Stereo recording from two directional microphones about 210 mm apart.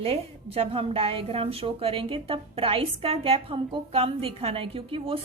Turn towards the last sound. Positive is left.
turn(degrees=-25)  # may be behind; listen again after turning